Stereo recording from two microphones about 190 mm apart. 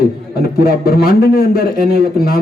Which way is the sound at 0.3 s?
55° left (ahead or behind).